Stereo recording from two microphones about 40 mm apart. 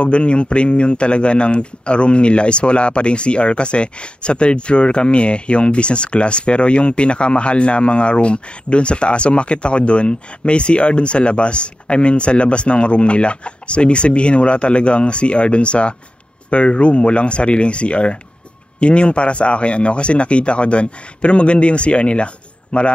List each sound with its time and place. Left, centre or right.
0.0 s speech: left